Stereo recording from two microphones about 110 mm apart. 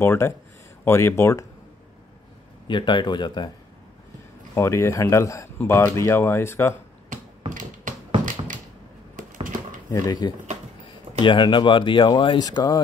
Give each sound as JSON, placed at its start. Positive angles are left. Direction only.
{"t": 0.0, "sound": "speech", "side_deg": 25}
{"t": 2.7, "sound": "speech", "side_deg": 45}
{"t": 4.6, "sound": "speech", "side_deg": 25}
{"t": 9.8, "sound": "speech", "side_deg": 40}
{"t": 12.4, "sound": "speech", "side_deg": 35}